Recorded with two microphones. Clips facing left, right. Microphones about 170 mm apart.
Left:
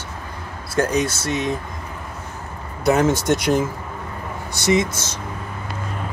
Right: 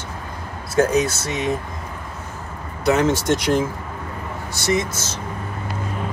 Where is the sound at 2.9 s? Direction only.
10° left (ahead or behind).